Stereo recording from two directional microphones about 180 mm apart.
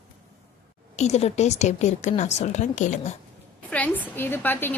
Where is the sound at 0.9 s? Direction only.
35° left (ahead or behind).